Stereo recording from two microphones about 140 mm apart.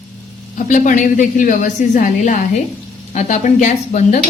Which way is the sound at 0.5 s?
65° left (ahead or behind).